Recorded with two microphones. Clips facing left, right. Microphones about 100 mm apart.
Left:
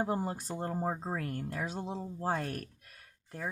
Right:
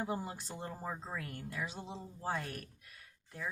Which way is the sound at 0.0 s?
45° left (ahead or behind).